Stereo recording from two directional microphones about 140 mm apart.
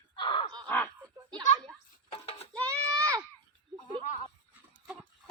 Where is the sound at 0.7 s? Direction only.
15° left (ahead or behind).